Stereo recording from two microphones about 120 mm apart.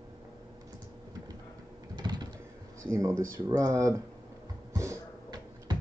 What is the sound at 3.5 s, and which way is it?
Speech, 30° right (ahead or behind).